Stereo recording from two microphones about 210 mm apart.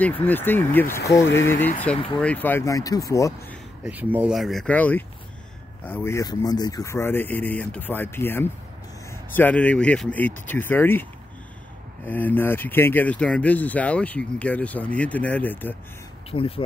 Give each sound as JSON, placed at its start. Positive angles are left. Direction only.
{"t": 0.0, "sound": "speech", "side_deg": 10}
{"t": 3.8, "sound": "speech", "side_deg": -10}
{"t": 12.1, "sound": "speech", "side_deg": 10}
{"t": 16.3, "sound": "speech", "side_deg": 25}